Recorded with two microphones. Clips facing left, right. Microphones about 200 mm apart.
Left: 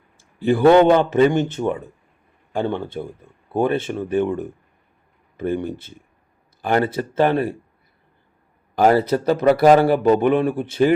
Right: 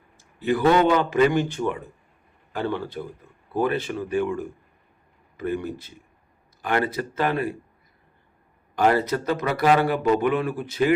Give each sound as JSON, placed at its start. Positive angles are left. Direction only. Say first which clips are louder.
{"t": 0.2, "sound": "a man's voice", "louder": "left 5 dB", "side_deg": 30}
{"t": 5.6, "sound": "a man's voice", "louder": "left 3 dB", "side_deg": 25}
{"t": 8.8, "sound": "a man's voice", "louder": "left 5 dB", "side_deg": 35}